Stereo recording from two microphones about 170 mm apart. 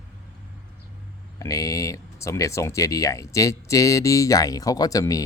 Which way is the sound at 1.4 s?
20° left (ahead or behind).